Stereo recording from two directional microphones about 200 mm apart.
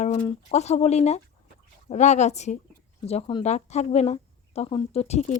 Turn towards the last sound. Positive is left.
turn(degrees=30)  # may be behind; listen again after turning